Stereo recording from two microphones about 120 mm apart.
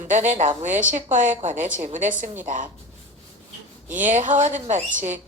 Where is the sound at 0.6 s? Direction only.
90° right.